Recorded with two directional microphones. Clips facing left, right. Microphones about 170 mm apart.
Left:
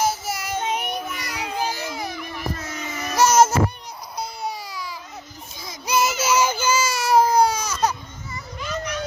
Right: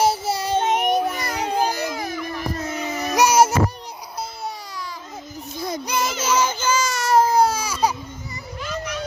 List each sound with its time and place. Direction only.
0.0 s child singing: 30° right (ahead or behind)
0.6 s child singing: 50° right (ahead or behind)
2.6 s a sound: 35° right (ahead or behind)
3.2 s music: 10° right (ahead or behind)
5.5 s child singing: 60° right (ahead or behind)
5.8 s baby cry: 5° left (ahead or behind); by 7.9 s 10° right (ahead or behind)